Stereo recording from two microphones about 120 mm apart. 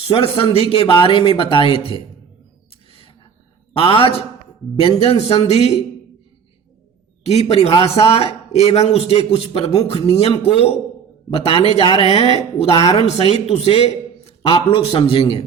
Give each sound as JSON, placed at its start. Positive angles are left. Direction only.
{"t": 0.0, "sound": "a man's voice", "side_deg": 50}
{"t": 3.8, "sound": "a man's voice", "side_deg": 50}
{"t": 7.3, "sound": "speech", "side_deg": 60}
{"t": 11.3, "sound": "a man's voice", "side_deg": 50}